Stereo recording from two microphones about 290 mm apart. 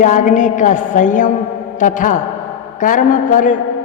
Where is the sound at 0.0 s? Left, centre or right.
Left.